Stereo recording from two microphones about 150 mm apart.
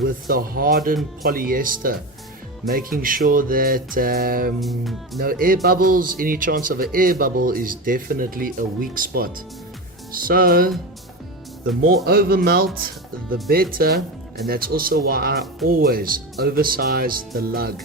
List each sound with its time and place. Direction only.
0.0 s speech: 75° right (ahead or behind)
3.0 s speech: 70° right (ahead or behind)
4.6 s speech: centre (ahead or behind)
5.2 s speech: 75° right (ahead or behind)
12.0 s speech: 85° right